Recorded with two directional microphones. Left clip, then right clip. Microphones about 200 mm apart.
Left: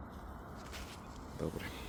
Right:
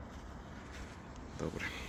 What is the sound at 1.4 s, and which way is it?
Speech, 10° left (ahead or behind).